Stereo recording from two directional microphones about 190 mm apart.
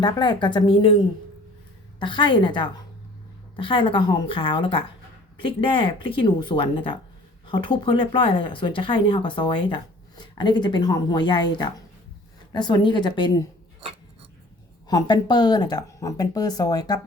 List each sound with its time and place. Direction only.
0.0 s speech: 25° left (ahead or behind)
2.0 s speech: 25° left (ahead or behind)
14.8 s speech: 20° left (ahead or behind)